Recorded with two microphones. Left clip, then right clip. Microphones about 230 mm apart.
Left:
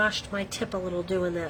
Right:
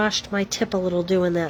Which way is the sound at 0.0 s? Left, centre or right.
Right.